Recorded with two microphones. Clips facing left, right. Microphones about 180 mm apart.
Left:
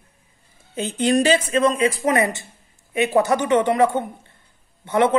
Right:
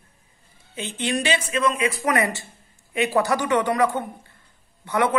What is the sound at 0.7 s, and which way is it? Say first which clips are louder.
Speech: left 7 dB; 40° left (ahead or behind).